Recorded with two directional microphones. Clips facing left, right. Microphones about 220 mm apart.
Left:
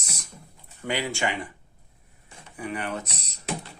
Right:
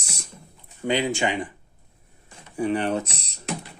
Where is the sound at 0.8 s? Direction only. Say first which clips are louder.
Right 5 dB; 20° right (ahead or behind).